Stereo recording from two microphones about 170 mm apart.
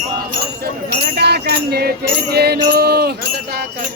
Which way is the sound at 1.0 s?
70° right (ahead or behind).